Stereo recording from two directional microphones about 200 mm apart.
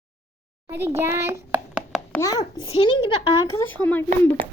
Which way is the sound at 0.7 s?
10° right (ahead or behind).